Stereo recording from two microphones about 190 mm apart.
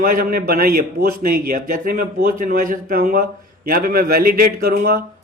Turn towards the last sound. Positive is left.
turn(degrees=-50)  # may be behind; listen again after turning